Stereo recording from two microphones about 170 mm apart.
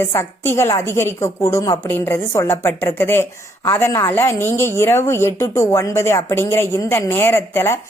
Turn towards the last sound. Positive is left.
turn(degrees=15)  # may be behind; listen again after turning